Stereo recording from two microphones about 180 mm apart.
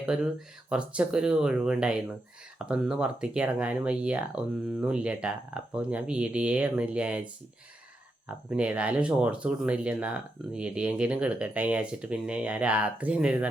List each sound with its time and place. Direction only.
0.0 s speech: 5° right (ahead or behind)
8.3 s speech: 5° right (ahead or behind)